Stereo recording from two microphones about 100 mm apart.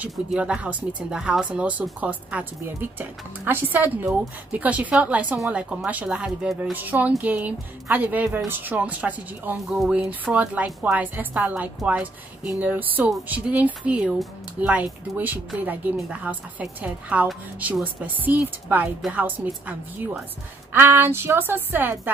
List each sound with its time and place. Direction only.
0.0 s speech: 10° right (ahead or behind)
9.7 s speech: centre (ahead or behind)
9.9 s speech: 15° right (ahead or behind)